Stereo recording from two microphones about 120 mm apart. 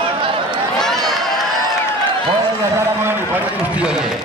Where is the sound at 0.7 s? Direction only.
5° left (ahead or behind).